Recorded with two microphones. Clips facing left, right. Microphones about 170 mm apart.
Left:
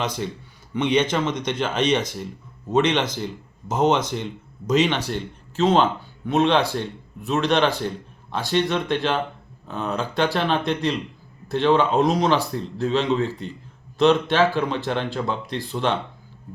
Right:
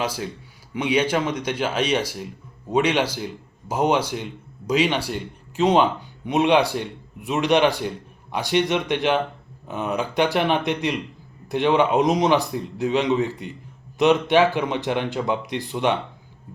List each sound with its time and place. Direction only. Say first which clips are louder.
0.0 s speech: even; 5° right (ahead or behind)